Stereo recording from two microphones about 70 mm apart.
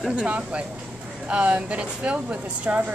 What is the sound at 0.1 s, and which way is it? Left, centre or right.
A woman's voice, centre.